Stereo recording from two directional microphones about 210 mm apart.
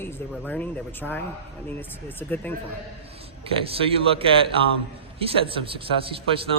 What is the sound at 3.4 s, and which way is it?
Speech, 25° right (ahead or behind).